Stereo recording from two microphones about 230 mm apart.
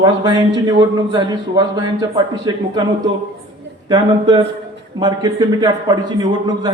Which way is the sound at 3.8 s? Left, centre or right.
Centre.